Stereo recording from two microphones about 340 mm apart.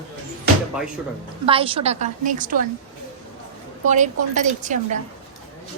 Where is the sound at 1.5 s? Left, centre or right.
Centre.